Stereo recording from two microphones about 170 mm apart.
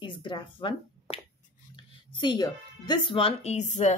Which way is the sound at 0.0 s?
30° left (ahead or behind).